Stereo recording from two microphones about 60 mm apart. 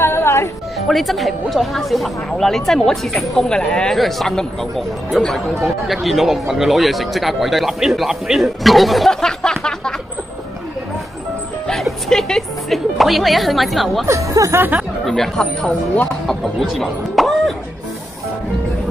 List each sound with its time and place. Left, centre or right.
0.0 s music: left
0.7 s speech: centre
3.4 s speech: centre
3.9 s speech: centre
11.6 s a woman's voice: centre
14.0 s speech: right
15.0 s speech: centre
16.1 s speech: centre